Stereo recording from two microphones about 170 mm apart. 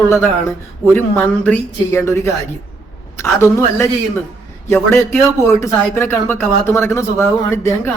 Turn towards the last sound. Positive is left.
turn(degrees=15)  # may be behind; listen again after turning